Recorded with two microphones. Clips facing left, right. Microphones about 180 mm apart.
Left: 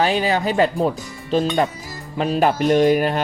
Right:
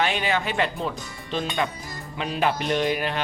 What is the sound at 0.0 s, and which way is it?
Speech, 35° left (ahead or behind).